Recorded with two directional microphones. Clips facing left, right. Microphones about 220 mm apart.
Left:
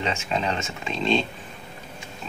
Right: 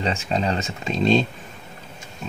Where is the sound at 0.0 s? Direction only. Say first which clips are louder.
Right 3 dB; 35° right (ahead or behind).